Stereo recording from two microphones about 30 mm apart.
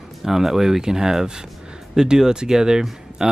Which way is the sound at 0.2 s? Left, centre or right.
Centre.